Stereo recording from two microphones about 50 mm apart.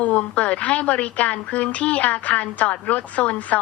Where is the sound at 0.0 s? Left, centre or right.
Left.